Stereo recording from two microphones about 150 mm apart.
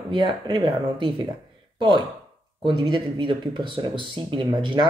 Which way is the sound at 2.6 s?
35° right (ahead or behind).